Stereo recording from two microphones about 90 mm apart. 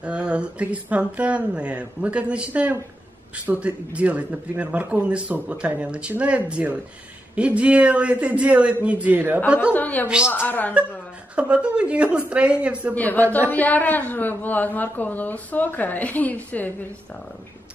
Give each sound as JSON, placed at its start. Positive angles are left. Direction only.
{"t": 0.0, "sound": "speech", "side_deg": -10}
{"t": 9.8, "sound": "a man's voice", "side_deg": 20}
{"t": 11.3, "sound": "speech", "side_deg": -15}
{"t": 12.9, "sound": "a man's voice", "side_deg": 20}